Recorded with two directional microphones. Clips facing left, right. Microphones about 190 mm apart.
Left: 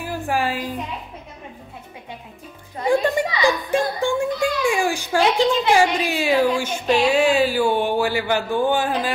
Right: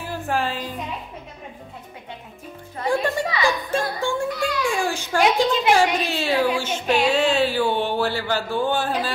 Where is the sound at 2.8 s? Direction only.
15° left (ahead or behind).